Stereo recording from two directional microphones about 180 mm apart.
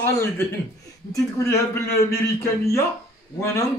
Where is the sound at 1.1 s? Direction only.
15° left (ahead or behind).